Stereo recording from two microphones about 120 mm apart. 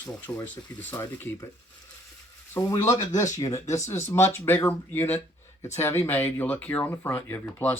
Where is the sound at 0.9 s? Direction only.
30° left (ahead or behind).